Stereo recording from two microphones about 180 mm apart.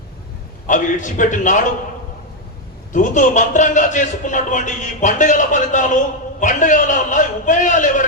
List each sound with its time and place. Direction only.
0.7 s a man's voice: 45° left (ahead or behind)
2.9 s a man's voice: 45° left (ahead or behind)